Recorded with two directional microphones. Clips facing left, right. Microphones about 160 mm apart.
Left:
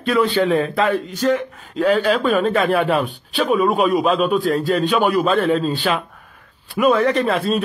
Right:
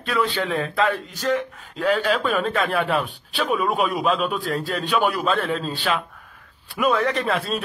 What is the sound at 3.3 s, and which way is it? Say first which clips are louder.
Speech: left 5 dB; 35° left (ahead or behind).